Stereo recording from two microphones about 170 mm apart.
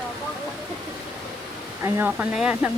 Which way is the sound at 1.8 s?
15° right (ahead or behind).